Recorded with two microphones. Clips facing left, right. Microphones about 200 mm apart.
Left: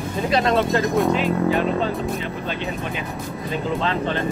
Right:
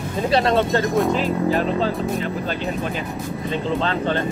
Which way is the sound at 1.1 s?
35° right (ahead or behind).